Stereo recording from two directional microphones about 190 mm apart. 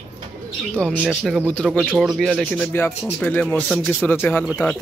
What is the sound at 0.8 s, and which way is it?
Speech, 5° left (ahead or behind).